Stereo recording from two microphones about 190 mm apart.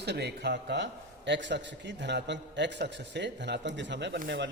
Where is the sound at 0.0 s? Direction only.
60° right (ahead or behind).